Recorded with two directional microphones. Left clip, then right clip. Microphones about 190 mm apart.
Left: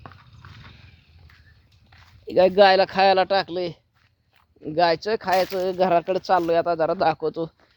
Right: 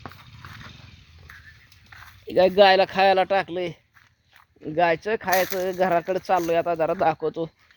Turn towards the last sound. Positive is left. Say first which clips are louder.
# left 1 dB
turn(degrees=5)  # may be behind; listen again after turning